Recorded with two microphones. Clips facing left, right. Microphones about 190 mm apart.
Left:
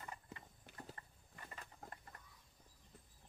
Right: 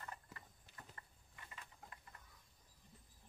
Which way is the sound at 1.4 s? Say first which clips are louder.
Left 4 dB; 45° left (ahead or behind).